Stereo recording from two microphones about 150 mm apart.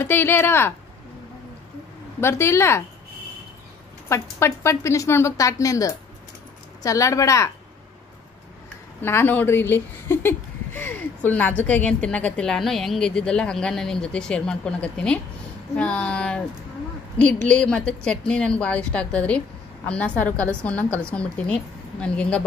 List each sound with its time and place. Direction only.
0.0 s speech: 15° left (ahead or behind)
2.1 s speech: 15° left (ahead or behind)
4.1 s a woman's voice: 20° left (ahead or behind)
9.0 s speech: 15° left (ahead or behind)